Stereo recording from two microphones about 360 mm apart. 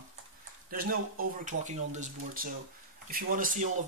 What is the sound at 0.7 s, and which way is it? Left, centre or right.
Speech, right.